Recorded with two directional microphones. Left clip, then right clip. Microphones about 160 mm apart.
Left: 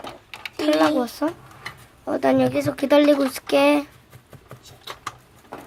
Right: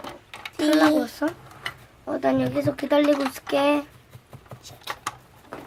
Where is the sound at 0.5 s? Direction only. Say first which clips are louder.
Even; 25° left (ahead or behind).